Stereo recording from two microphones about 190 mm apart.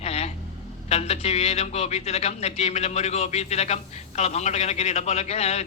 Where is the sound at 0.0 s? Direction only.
35° left (ahead or behind).